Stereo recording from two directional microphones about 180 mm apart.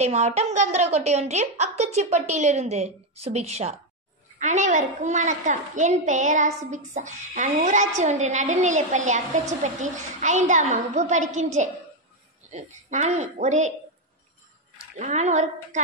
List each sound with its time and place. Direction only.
0.0 s a woman's voice: 35° right (ahead or behind)
15.0 s a woman's voice: 40° right (ahead or behind)